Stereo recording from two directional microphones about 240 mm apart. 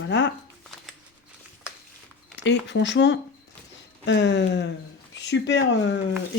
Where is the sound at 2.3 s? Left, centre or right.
Left.